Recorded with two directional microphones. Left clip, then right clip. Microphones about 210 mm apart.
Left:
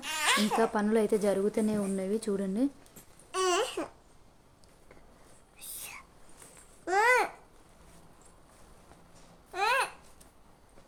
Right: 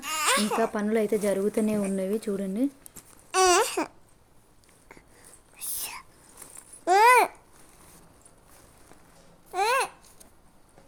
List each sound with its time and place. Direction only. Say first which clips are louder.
0.0 s babbling: right 3 dB; 10° right (ahead or behind)
0.6 s speech: right 2 dB; centre (ahead or behind)
3.3 s babbling: right 8 dB; 50° right (ahead or behind)
5.5 s whispering: right 7 dB; 50° right (ahead or behind)
6.8 s babbling: right 7 dB; 35° right (ahead or behind)
9.5 s babbling: right 3 dB; 25° right (ahead or behind)